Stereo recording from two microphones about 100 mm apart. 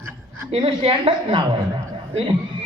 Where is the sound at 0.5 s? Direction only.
70° right (ahead or behind).